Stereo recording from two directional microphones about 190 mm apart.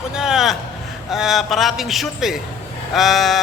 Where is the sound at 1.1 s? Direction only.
Centre (ahead or behind).